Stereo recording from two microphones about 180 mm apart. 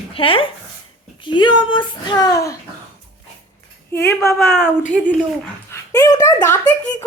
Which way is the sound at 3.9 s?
10° left (ahead or behind).